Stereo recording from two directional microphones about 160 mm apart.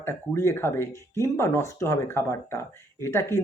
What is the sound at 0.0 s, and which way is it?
Speech, 15° left (ahead or behind).